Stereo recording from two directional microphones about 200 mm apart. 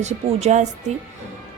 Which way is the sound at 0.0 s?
35° right (ahead or behind).